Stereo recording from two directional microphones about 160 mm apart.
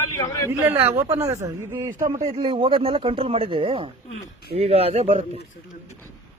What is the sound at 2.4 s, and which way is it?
Speech, 35° right (ahead or behind).